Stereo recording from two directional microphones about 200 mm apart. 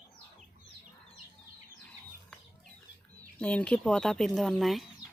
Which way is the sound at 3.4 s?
5° left (ahead or behind).